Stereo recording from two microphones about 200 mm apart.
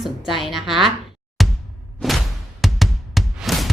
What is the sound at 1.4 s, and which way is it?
Music, centre (ahead or behind).